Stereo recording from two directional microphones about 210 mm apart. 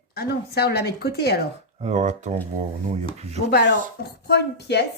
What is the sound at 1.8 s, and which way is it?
Speech, 35° right (ahead or behind).